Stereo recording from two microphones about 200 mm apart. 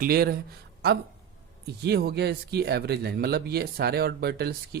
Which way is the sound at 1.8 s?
55° right (ahead or behind).